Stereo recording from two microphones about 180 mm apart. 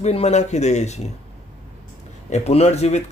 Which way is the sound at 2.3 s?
35° left (ahead or behind).